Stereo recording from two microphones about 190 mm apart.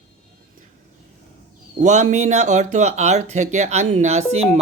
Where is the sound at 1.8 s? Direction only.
40° right (ahead or behind).